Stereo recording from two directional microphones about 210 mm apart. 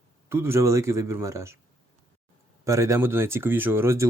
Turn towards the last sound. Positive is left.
turn(degrees=-10)  # may be behind; listen again after turning